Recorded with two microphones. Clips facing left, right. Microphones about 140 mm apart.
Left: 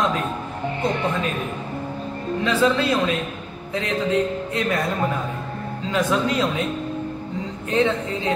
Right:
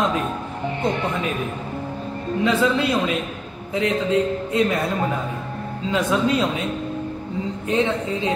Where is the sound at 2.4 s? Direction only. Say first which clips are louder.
Even; 15° right (ahead or behind).